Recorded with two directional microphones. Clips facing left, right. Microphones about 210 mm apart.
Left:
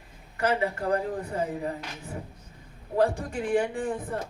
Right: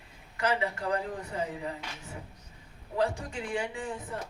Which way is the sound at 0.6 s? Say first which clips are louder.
Left 4 dB; 35° left (ahead or behind).